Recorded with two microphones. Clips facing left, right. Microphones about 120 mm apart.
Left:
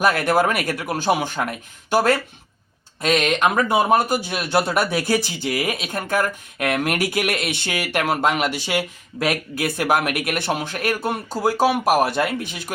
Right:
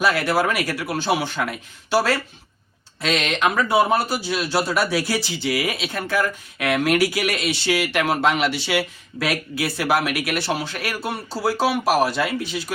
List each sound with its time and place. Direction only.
0.0 s speech: 50° left (ahead or behind)
3.7 s speech: 15° left (ahead or behind)
3.9 s speech: 50° left (ahead or behind)